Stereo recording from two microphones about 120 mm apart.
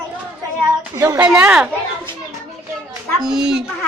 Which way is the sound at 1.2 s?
10° right (ahead or behind).